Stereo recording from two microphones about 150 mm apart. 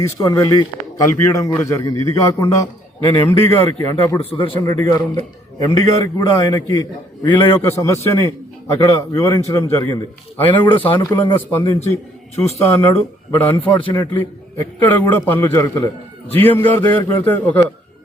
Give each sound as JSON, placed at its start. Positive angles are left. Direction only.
{"t": 0.0, "sound": "a man's voice", "side_deg": 20}
{"t": 4.3, "sound": "a man's voice", "side_deg": 35}
{"t": 4.6, "sound": "a man's voice", "side_deg": 25}
{"t": 13.3, "sound": "a man's voice", "side_deg": 15}